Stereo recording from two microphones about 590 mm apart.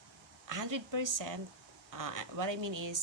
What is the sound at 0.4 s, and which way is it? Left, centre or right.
Speech, right.